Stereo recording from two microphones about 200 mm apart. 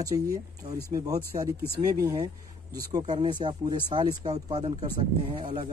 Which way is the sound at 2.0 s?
15° right (ahead or behind).